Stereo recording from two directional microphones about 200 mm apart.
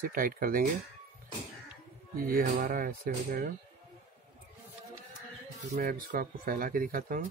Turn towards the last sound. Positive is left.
turn(degrees=-45)  # may be behind; listen again after turning